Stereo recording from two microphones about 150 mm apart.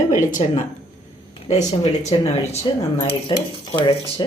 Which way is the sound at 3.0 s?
35° left (ahead or behind).